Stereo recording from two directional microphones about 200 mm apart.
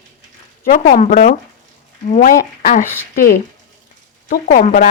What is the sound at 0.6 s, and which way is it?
Speech, 45° left (ahead or behind).